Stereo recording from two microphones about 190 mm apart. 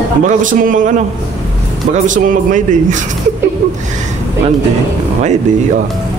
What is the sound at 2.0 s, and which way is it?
Speech, 45° right (ahead or behind).